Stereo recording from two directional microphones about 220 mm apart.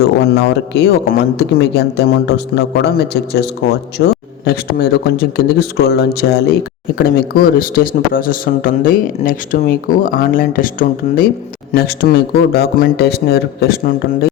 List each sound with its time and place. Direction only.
0.3 s speech: 50° left (ahead or behind)